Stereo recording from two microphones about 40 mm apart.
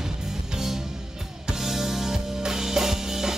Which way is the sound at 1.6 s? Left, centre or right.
Centre.